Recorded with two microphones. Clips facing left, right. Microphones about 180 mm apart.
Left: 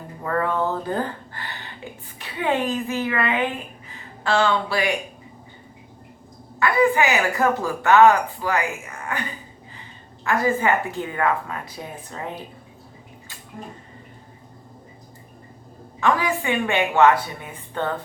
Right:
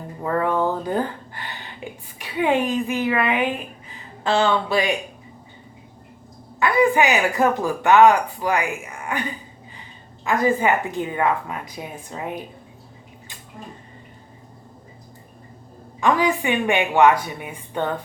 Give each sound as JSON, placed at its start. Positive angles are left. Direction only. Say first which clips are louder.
{"t": 0.2, "sound": "speech", "louder": "right 2 dB", "side_deg": -15}
{"t": 6.6, "sound": "speech", "louder": "right 1 dB", "side_deg": -20}
{"t": 10.2, "sound": "speech", "louder": "right 1 dB", "side_deg": -20}
{"t": 16.0, "sound": "speech", "louder": "right 2 dB", "side_deg": -15}